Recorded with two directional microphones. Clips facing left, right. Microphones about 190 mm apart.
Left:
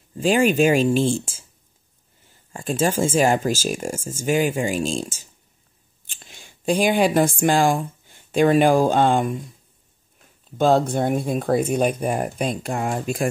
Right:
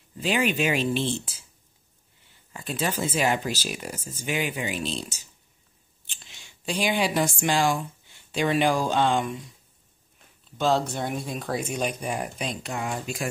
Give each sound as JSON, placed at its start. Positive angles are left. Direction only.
{"t": 0.2, "sound": "speech", "side_deg": 45}
{"t": 2.5, "sound": "speech", "side_deg": 45}
{"t": 10.6, "sound": "speech", "side_deg": 50}